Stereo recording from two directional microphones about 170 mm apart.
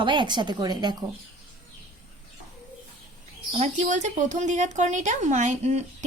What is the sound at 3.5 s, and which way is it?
Speech, 40° right (ahead or behind).